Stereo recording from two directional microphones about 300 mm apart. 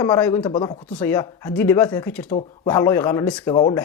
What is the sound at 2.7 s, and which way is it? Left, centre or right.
Speech, centre.